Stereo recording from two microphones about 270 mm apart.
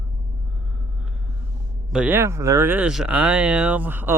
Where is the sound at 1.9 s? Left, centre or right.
Centre.